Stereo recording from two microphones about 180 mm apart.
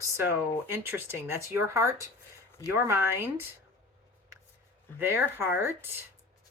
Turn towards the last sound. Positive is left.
turn(degrees=-10)  # may be behind; listen again after turning